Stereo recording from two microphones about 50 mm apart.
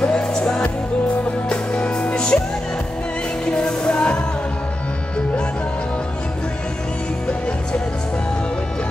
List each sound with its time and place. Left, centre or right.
0.0 s music: centre
3.4 s music: centre